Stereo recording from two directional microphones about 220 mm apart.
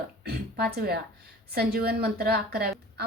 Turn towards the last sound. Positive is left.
turn(degrees=-45)  # may be behind; listen again after turning